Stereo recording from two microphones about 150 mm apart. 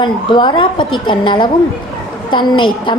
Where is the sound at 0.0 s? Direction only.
30° left (ahead or behind).